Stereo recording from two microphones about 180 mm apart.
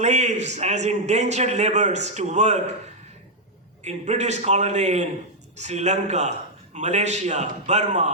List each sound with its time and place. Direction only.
0.0 s a man's voice: 40° right (ahead or behind)
3.8 s a man's voice: 40° right (ahead or behind)